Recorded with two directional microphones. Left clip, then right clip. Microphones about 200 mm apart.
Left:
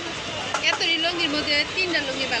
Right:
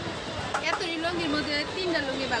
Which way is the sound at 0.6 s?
40° right (ahead or behind).